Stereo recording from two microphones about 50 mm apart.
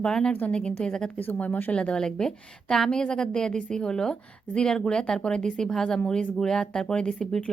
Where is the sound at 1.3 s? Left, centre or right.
Left.